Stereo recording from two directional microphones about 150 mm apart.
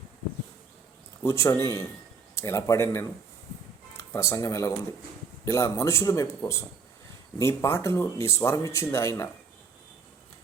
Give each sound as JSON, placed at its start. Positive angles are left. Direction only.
{"t": 1.2, "sound": "speech", "side_deg": 20}